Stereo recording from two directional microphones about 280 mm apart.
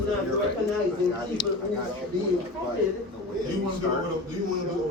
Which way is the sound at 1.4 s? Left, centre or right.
Centre.